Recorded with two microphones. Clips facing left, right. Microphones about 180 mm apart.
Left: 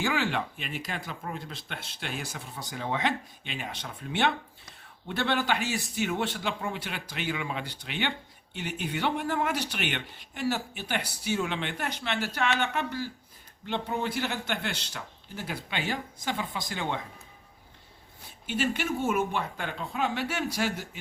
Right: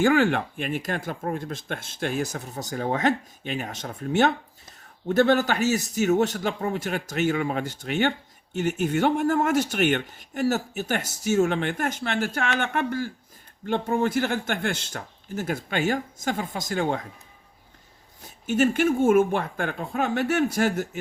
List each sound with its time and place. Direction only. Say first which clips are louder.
0.0 s speech: right 9 dB; 50° right (ahead or behind)
18.4 s speech: right 8 dB; 45° right (ahead or behind)